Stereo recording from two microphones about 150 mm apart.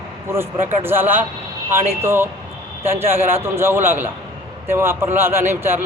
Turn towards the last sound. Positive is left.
turn(degrees=-15)  # may be behind; listen again after turning